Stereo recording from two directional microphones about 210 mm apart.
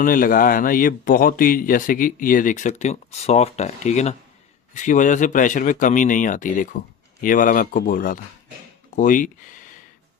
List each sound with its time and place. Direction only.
0.0 s speech: 45° left (ahead or behind)